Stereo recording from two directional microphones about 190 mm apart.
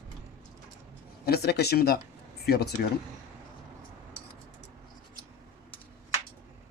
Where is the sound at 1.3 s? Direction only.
55° left (ahead or behind).